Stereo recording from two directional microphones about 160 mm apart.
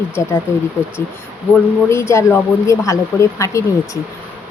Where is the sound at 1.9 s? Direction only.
15° left (ahead or behind).